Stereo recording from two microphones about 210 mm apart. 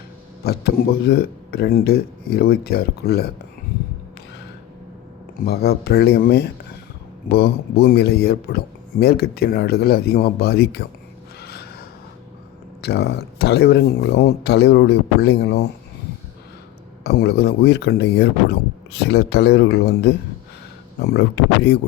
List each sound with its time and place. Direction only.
0.4 s speech: 50° left (ahead or behind)
5.5 s speech: 50° left (ahead or behind)
11.4 s gasp: 50° left (ahead or behind)
12.8 s speech: 50° left (ahead or behind)
17.0 s speech: 50° left (ahead or behind)